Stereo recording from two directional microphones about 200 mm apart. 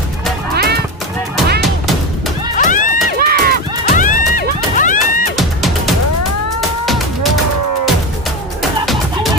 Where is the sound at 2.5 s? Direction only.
40° left (ahead or behind).